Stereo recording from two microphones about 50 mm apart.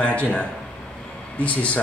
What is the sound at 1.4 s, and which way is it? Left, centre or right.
Speech, left.